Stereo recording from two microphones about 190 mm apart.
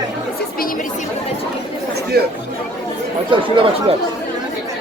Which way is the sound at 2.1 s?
55° right (ahead or behind).